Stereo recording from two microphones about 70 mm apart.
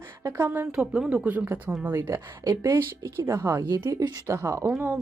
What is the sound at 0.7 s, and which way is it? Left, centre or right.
Speech, centre.